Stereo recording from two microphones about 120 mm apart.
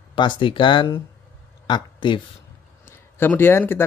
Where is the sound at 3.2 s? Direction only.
20° left (ahead or behind).